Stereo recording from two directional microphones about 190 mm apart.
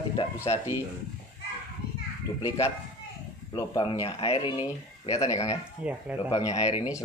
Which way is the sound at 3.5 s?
20° left (ahead or behind).